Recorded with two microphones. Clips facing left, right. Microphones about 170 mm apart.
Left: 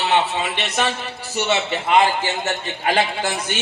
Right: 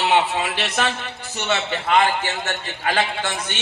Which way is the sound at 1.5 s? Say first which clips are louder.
Left 1 dB; 20° left (ahead or behind).